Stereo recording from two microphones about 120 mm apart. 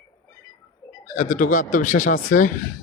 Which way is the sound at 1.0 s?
90° left.